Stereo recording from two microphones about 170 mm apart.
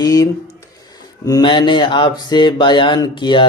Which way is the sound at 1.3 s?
25° left (ahead or behind).